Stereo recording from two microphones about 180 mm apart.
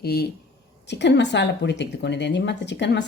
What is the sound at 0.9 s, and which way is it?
A woman's voice, 75° left (ahead or behind).